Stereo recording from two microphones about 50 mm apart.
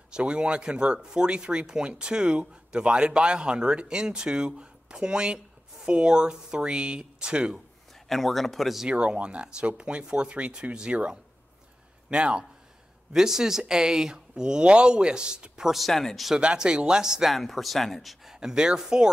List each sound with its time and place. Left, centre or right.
0.1 s speech: centre
8.1 s speech: centre
8.8 s speech: centre
15.7 s speech: centre
16.3 s speech: centre
17.4 s speech: centre